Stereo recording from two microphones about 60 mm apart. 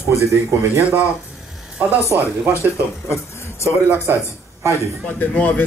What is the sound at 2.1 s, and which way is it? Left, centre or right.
Speech, right.